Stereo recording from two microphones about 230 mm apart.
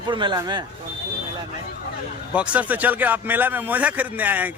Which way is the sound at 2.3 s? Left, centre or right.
Centre.